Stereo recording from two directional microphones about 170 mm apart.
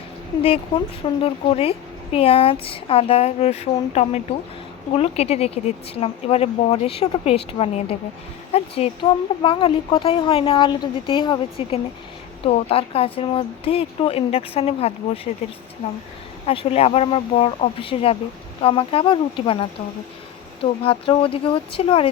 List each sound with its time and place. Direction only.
1.2 s speech: 35° left (ahead or behind)
16.5 s speech: 35° left (ahead or behind)